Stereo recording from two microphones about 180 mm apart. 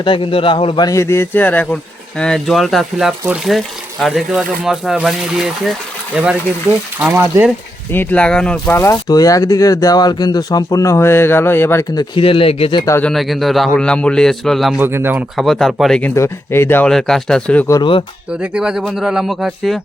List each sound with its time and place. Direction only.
0.0 s speech: 30° left (ahead or behind); by 7.5 s 10° right (ahead or behind)
7.9 s speech: 5° left (ahead or behind)
12.1 s speech: 30° left (ahead or behind)
12.8 s speech: 15° left (ahead or behind)
13.1 s speech: centre (ahead or behind)
14.8 s speech: 10° right (ahead or behind)
15.4 s speech: centre (ahead or behind)
17.7 s speech: 30° left (ahead or behind)
18.3 s speech: 5° right (ahead or behind)